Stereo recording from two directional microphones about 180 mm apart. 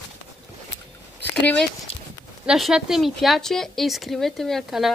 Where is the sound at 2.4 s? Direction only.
5° right (ahead or behind).